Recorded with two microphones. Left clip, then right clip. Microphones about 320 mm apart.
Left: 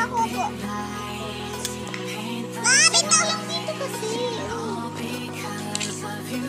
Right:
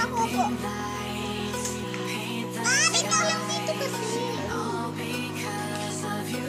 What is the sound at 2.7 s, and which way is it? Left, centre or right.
Music, left.